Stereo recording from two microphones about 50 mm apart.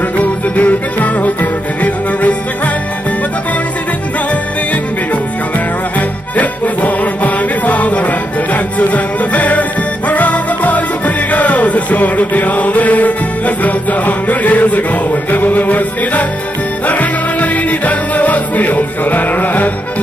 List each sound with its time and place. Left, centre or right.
0.2 s music: left
5.9 s music: left